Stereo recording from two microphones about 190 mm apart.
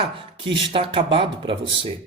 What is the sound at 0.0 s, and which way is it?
A man's voice, 25° right (ahead or behind).